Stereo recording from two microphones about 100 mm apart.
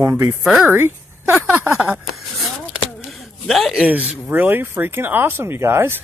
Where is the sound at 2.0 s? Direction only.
Centre (ahead or behind).